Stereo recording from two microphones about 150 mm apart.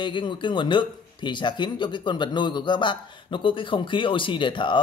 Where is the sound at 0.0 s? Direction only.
30° left (ahead or behind).